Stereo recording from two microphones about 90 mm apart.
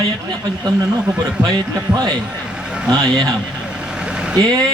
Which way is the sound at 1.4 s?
50° right (ahead or behind).